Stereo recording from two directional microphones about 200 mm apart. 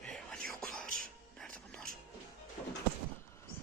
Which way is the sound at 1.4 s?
Centre (ahead or behind).